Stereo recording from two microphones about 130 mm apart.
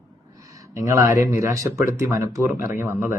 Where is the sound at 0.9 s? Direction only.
25° right (ahead or behind).